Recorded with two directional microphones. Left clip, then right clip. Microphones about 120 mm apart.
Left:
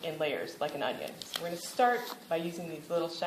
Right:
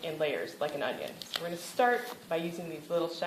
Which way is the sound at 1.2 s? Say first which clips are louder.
Right 1 dB; 5° right (ahead or behind).